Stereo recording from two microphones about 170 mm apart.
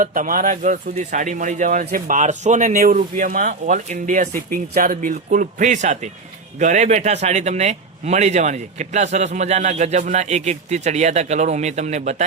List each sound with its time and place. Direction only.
0.0 s speech: 50° right (ahead or behind)